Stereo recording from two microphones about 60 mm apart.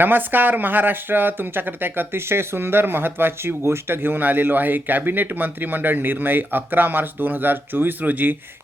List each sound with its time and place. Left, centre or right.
0.0 s speech: right